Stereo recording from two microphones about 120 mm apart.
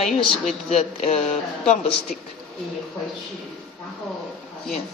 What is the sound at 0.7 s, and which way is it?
Speech, 70° left (ahead or behind).